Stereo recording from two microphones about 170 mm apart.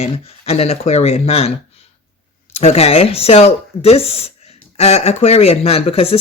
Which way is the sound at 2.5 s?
40° left (ahead or behind).